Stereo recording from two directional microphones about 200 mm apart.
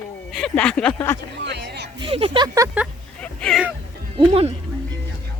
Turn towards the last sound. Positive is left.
turn(degrees=-30)  # may be behind; listen again after turning